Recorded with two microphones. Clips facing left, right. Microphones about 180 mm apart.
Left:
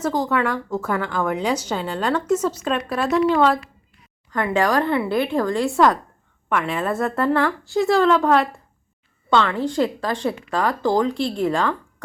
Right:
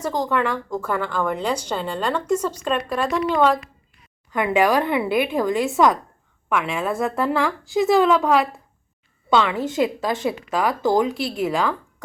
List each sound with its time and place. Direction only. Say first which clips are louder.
0.1 s a woman's voice: right 2 dB; 5° left (ahead or behind)
4.3 s a woman's voice: right 2 dB; 15° right (ahead or behind)
5.6 s a woman's voice: left 1 dB; centre (ahead or behind)
9.3 s a woman's voice: even; 10° right (ahead or behind)
11.2 s speech: left 1 dB; 5° right (ahead or behind)